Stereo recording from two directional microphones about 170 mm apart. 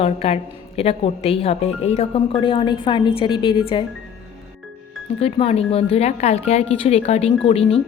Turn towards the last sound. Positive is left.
turn(degrees=35)  # may be behind; listen again after turning